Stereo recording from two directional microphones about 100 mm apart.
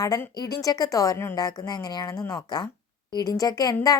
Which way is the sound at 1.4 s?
45° left (ahead or behind).